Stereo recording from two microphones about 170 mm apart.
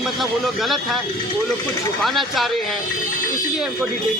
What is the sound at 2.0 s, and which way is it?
Speech, centre (ahead or behind).